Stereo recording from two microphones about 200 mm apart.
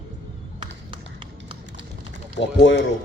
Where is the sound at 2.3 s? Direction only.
60° left (ahead or behind).